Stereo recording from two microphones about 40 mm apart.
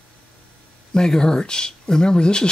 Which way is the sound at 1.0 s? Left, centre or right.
Centre.